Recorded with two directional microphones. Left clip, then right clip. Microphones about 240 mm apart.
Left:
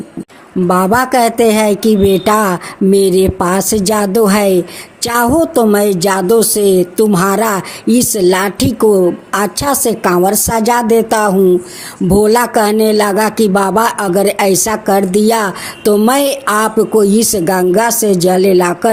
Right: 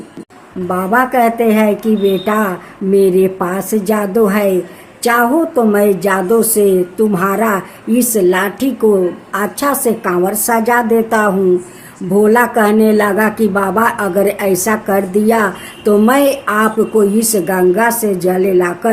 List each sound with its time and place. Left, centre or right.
0.7 s speech: left